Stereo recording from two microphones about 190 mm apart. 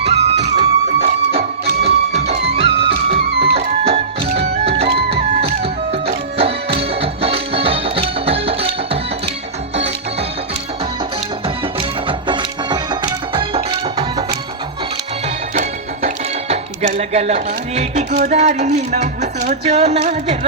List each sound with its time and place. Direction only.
0.0 s music: 35° right (ahead or behind)
4.9 s music: 60° right (ahead or behind)
5.6 s music: 30° right (ahead or behind)
11.4 s music: 25° right (ahead or behind)
15.5 s speech: 35° right (ahead or behind)